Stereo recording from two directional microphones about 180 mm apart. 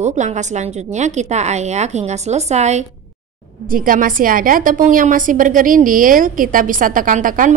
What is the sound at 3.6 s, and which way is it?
A woman's voice, 50° right (ahead or behind).